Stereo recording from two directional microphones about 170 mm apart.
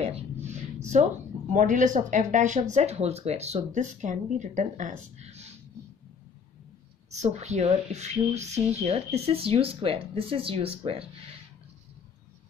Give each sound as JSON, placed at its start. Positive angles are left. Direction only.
{"t": 0.0, "sound": "a sound", "side_deg": -40}
{"t": 1.5, "sound": "speech", "side_deg": -45}
{"t": 7.1, "sound": "speech", "side_deg": -40}